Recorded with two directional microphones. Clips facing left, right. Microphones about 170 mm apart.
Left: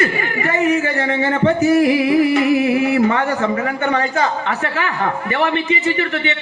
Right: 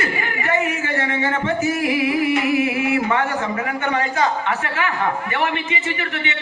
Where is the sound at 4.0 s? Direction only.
35° left (ahead or behind).